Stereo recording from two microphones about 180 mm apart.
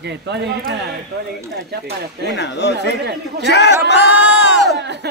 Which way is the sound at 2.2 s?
70° left (ahead or behind).